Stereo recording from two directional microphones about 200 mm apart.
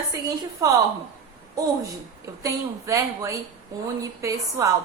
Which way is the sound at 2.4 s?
15° right (ahead or behind).